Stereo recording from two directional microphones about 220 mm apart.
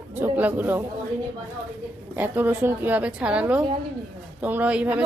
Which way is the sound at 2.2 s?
10° right (ahead or behind).